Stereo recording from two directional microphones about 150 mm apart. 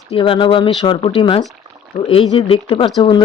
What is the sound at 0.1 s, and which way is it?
Speech, 35° left (ahead or behind).